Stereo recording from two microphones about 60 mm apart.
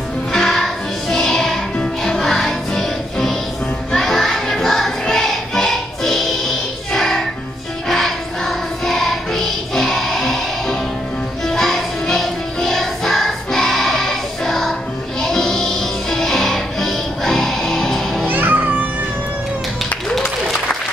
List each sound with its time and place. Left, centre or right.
0.3 s music: centre
18.3 s music: right